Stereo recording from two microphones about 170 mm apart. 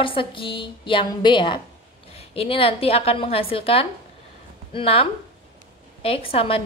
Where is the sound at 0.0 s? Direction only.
30° left (ahead or behind).